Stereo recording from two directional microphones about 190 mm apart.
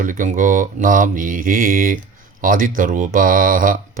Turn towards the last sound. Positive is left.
turn(degrees=-45)  # may be behind; listen again after turning